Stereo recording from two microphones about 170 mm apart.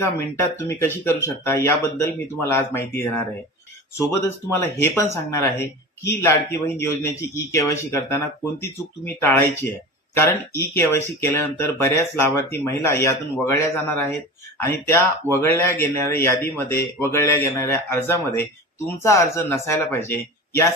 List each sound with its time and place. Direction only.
0.0 s speech: 15° left (ahead or behind)
4.2 s speech: 15° left (ahead or behind)